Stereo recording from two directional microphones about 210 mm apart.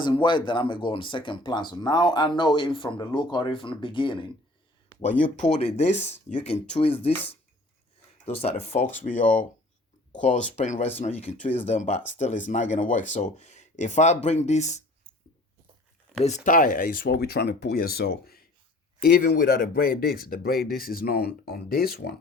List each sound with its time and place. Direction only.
0.0 s speech: 20° left (ahead or behind)
5.4 s speech: 35° left (ahead or behind)
8.2 s speech: 30° left (ahead or behind)
16.2 s speech: 35° left (ahead or behind)